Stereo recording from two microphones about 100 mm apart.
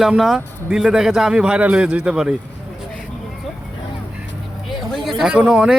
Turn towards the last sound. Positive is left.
turn(degrees=-10)  # may be behind; listen again after turning